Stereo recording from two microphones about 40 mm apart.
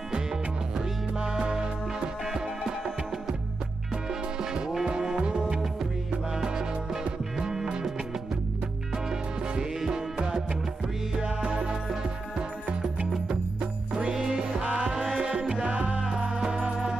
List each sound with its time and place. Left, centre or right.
0.1 s music: centre
8.9 s music: centre